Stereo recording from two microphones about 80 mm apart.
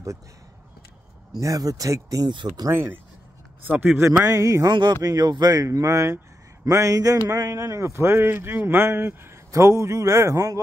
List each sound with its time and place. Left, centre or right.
1.3 s speech: right
2.2 s speech: right
2.7 s speech: right
4.0 s speech: right
4.6 s speech: right
5.0 s speech: right